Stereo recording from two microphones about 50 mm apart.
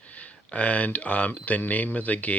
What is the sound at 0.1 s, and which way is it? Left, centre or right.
Speech, left.